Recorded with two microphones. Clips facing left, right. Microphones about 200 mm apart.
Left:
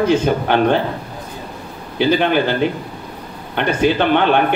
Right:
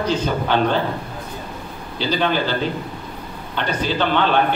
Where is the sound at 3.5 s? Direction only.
55° left (ahead or behind).